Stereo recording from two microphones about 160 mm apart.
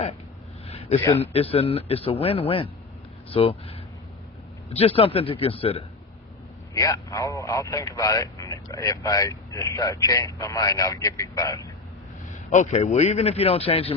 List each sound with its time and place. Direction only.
0.7 s a sound: 35° left (ahead or behind)
1.2 s a man's voice: 35° left (ahead or behind)
6.7 s speech: 20° left (ahead or behind)
12.3 s a man's voice: 50° left (ahead or behind)